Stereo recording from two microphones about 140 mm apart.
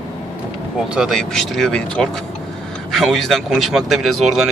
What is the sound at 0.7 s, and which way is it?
Speech, 5° right (ahead or behind).